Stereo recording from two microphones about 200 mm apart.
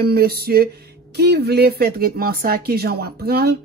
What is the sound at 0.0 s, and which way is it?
A woman's voice, 50° right (ahead or behind).